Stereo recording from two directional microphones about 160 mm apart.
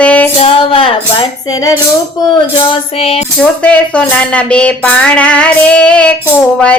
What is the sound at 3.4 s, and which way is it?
A woman's voice, 10° left (ahead or behind).